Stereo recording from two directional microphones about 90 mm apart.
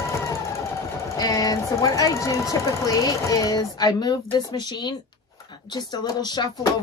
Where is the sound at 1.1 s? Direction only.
40° left (ahead or behind).